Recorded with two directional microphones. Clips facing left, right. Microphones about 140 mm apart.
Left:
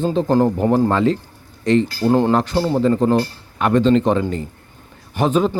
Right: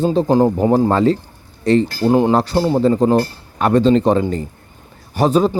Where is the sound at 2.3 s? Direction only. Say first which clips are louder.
Right 2 dB; 35° right (ahead or behind).